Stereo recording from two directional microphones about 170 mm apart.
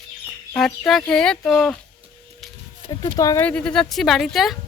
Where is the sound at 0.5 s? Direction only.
Centre (ahead or behind).